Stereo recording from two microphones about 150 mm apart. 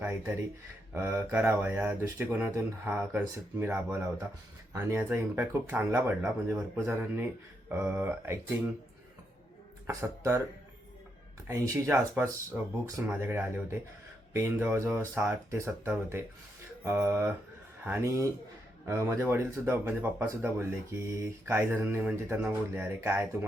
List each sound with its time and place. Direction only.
0.0 s speech: 15° right (ahead or behind)
9.8 s speech: 20° right (ahead or behind)
11.4 s speech: 20° right (ahead or behind)